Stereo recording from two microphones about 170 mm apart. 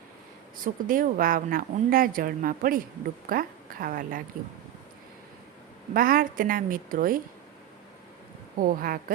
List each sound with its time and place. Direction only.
0.5 s a woman's voice: 55° right (ahead or behind)
5.9 s speech: 55° right (ahead or behind)
8.5 s speech: 55° right (ahead or behind)